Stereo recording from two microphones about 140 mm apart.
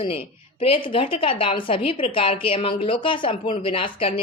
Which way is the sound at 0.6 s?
40° left (ahead or behind).